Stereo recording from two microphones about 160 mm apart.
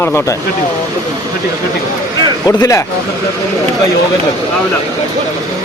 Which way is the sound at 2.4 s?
20° left (ahead or behind).